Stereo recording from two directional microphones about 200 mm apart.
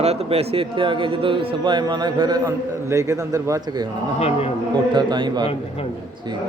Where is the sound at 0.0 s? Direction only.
30° right (ahead or behind); by 3.8 s 15° right (ahead or behind).